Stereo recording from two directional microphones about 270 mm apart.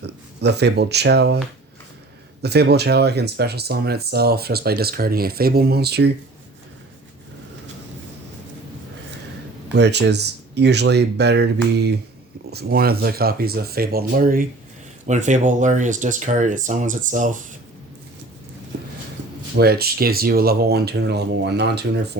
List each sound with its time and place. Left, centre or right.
0.0 s speech: right
2.4 s speech: right
9.7 s speech: right
19.5 s speech: right